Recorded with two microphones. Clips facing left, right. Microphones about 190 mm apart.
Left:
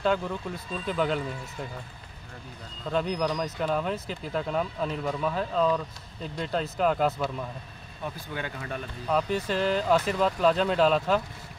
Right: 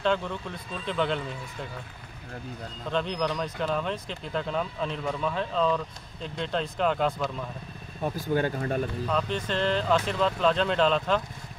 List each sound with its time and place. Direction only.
0.0 s speech: 5° left (ahead or behind)
2.9 s speech: 5° left (ahead or behind)
8.0 s speech: 40° right (ahead or behind)
9.1 s speech: 10° left (ahead or behind)